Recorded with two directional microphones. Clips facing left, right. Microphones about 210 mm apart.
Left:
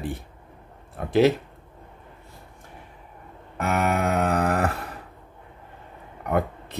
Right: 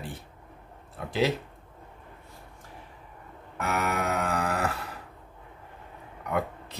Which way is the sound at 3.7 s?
50° left (ahead or behind).